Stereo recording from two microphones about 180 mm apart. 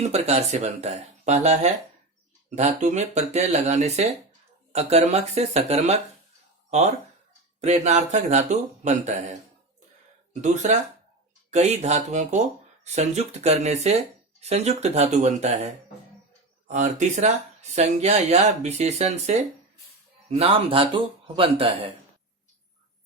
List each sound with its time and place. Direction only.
0.0 s speech: 35° right (ahead or behind)
10.4 s speech: 40° right (ahead or behind)